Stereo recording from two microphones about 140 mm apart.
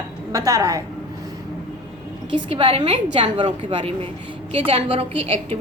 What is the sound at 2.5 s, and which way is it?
A woman's voice, 40° right (ahead or behind).